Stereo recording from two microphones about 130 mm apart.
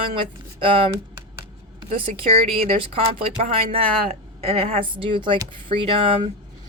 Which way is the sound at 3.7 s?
50° right (ahead or behind).